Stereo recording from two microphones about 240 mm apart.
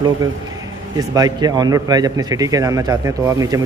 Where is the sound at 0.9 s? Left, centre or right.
Centre.